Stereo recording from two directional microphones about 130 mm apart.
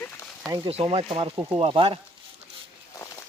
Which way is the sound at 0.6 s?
45° right (ahead or behind).